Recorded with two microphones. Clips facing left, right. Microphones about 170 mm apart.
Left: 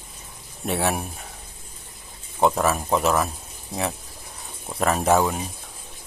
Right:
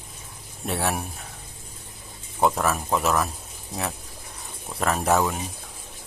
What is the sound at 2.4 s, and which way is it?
Speech, centre (ahead or behind).